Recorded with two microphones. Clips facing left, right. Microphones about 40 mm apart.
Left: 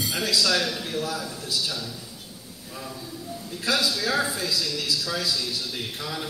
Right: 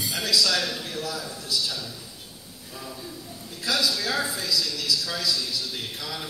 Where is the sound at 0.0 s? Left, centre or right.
Left.